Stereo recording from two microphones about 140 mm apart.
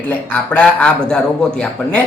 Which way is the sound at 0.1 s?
10° left (ahead or behind).